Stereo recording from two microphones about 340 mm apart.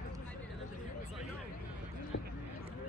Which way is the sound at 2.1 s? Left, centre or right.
Left.